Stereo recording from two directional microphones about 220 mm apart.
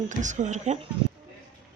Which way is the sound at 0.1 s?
35° right (ahead or behind).